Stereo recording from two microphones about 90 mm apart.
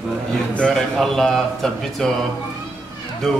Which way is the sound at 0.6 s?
5° left (ahead or behind).